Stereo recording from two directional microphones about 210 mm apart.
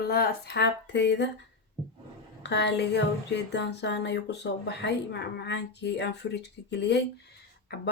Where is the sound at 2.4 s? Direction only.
55° left (ahead or behind).